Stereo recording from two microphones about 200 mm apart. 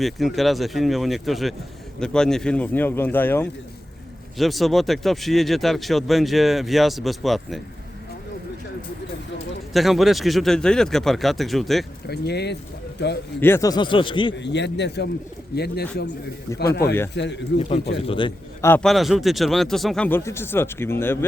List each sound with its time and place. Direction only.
0.0 s speech: centre (ahead or behind)
4.4 s speech: centre (ahead or behind)
9.7 s speech: centre (ahead or behind)
12.0 s a man's voice: 55° left (ahead or behind)
13.4 s speech: 15° left (ahead or behind)
14.3 s a man's voice: 60° left (ahead or behind)
17.2 s a man's voice: 60° left (ahead or behind)
18.0 s speech: 25° left (ahead or behind)
18.6 s speech: 10° left (ahead or behind)
18.9 s speech: centre (ahead or behind)